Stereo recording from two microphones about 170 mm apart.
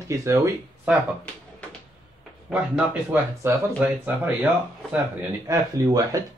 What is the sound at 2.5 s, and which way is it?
Speech, 10° right (ahead or behind).